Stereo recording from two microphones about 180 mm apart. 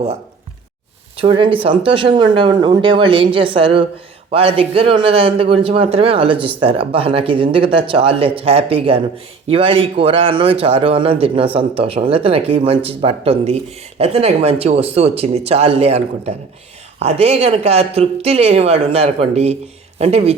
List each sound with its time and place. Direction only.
1.1 s a man's voice: 30° right (ahead or behind)